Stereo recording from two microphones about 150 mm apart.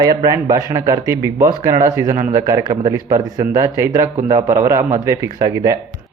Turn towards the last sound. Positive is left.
turn(degrees=-20)  # may be behind; listen again after turning